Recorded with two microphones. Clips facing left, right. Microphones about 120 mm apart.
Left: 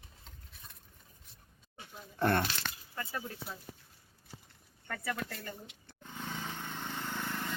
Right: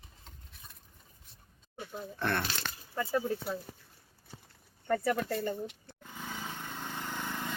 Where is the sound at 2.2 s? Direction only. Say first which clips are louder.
Left 4 dB; 40° left (ahead or behind).